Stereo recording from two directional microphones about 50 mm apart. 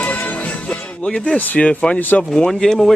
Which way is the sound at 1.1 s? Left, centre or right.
Centre.